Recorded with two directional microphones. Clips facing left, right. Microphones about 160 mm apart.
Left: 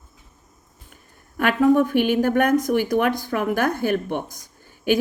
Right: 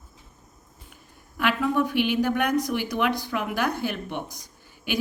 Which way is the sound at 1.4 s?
50° left (ahead or behind).